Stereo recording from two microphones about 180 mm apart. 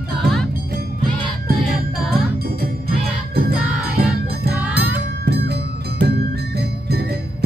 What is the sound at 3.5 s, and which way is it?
Music, 60° right (ahead or behind).